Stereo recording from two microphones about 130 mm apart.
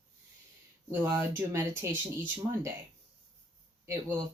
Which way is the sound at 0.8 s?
25° right (ahead or behind).